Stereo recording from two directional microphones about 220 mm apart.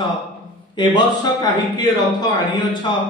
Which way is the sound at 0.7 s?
20° left (ahead or behind).